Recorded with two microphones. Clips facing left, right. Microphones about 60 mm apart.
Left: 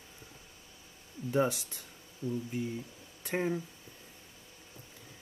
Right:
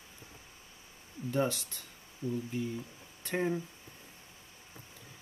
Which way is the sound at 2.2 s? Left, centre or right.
Right.